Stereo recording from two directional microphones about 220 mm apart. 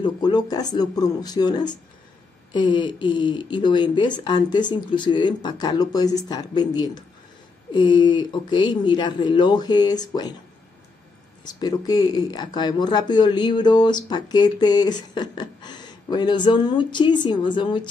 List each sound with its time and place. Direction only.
0.0 s speech: 20° left (ahead or behind)
11.4 s speech: 20° left (ahead or behind)